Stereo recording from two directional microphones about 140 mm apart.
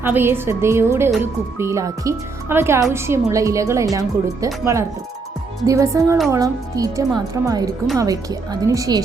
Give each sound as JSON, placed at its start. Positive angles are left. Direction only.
{"t": 0.0, "sound": "a woman's voice", "side_deg": -15}